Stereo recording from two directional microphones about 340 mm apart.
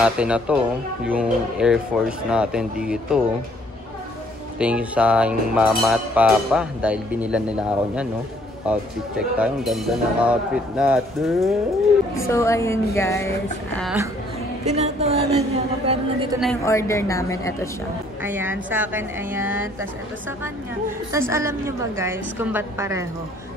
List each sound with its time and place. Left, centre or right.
0.0 s music: centre
4.6 s music: centre
12.3 s a woman's voice: centre
13.7 s music: centre
14.6 s a woman's voice: centre
16.3 s a woman's voice: centre
18.2 s music: centre
21.1 s a woman's voice: centre